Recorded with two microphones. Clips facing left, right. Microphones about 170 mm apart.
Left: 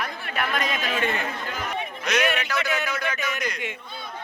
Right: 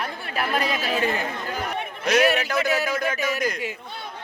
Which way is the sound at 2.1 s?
35° right (ahead or behind).